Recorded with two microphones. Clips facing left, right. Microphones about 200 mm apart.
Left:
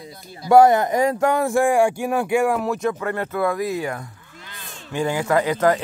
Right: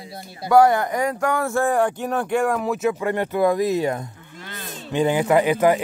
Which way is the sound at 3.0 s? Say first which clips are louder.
Right 3 dB; 15° right (ahead or behind).